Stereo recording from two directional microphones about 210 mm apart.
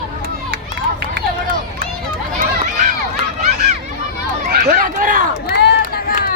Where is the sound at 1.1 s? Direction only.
45° right (ahead or behind).